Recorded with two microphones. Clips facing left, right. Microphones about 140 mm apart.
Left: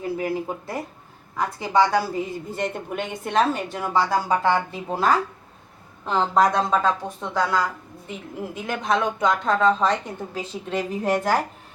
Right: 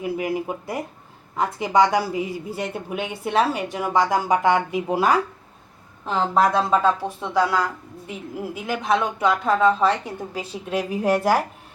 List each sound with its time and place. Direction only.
0.0 s a woman's voice: 15° right (ahead or behind)
8.6 s a woman's voice: 5° right (ahead or behind)